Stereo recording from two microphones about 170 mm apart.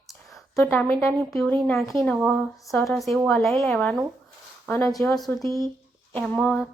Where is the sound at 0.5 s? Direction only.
15° left (ahead or behind).